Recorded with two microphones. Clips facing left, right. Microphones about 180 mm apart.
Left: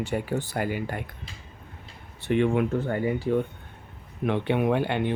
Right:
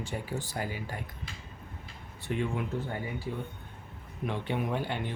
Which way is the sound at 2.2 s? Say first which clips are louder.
Left 10 dB; 75° left (ahead or behind).